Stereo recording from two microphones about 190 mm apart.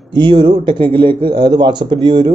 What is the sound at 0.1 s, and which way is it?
A man's voice, 25° right (ahead or behind).